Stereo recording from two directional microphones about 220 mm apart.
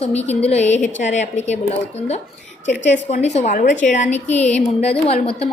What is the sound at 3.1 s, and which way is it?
A woman's voice, 30° left (ahead or behind).